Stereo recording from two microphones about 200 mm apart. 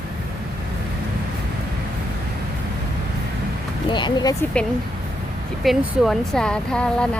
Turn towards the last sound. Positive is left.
turn(degrees=5)  # may be behind; listen again after turning